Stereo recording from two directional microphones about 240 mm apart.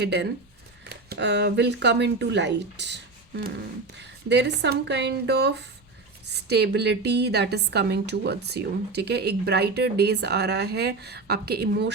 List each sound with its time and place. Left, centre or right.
0.0 s a woman's voice: right